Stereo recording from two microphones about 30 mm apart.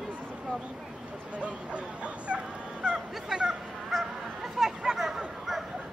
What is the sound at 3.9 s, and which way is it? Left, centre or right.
Honk, centre.